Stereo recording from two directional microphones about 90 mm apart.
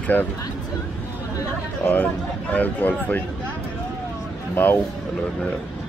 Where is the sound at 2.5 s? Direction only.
20° left (ahead or behind).